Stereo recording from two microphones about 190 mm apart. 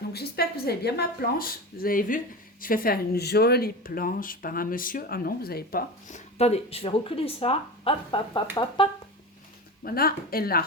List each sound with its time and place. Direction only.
0.1 s speech: 55° left (ahead or behind); by 8.4 s 25° left (ahead or behind)
9.8 s speech: 50° left (ahead or behind)